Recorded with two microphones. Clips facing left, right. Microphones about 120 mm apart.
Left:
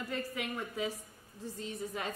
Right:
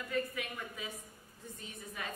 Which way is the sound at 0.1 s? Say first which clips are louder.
Right 2 dB; 30° left (ahead or behind).